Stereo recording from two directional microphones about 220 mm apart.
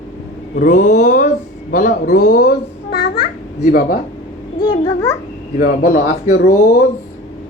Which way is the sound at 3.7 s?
45° left (ahead or behind).